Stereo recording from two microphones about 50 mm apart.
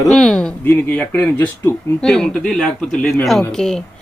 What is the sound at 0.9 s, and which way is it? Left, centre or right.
Speech, left.